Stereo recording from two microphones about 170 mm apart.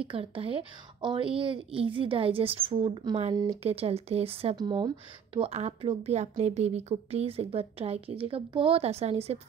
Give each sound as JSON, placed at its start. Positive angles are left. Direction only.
{"t": 0.1, "sound": "speech", "side_deg": -30}